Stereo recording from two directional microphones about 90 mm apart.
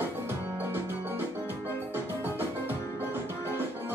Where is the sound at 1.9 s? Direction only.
25° right (ahead or behind).